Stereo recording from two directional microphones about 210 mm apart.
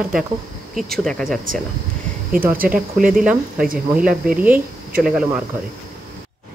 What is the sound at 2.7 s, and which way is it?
A woman's voice, 5° right (ahead or behind).